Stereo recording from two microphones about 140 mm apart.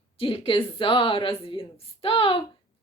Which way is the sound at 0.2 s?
40° left (ahead or behind).